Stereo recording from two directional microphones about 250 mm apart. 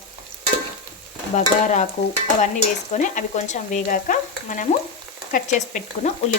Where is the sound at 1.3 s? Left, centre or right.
Left.